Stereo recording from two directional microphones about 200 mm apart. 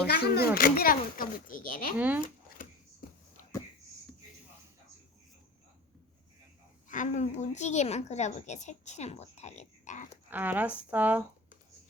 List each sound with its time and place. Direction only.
0.1 s speech: 50° left (ahead or behind)
2.0 s speech: 10° right (ahead or behind)
3.0 s a sound: 45° left (ahead or behind)
6.8 s a woman's voice: 40° left (ahead or behind)
10.2 s speech: 10° right (ahead or behind)